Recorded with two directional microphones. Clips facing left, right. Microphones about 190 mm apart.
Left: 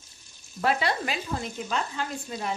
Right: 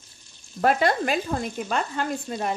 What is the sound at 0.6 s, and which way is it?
Frying, 50° right (ahead or behind).